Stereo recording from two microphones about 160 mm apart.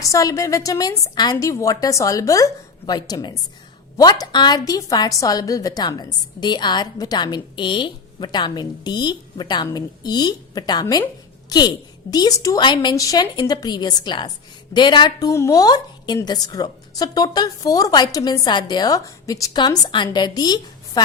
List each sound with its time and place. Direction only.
0.0 s a woman's voice: 20° left (ahead or behind)